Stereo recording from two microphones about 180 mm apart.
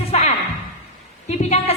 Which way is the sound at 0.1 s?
40° left (ahead or behind).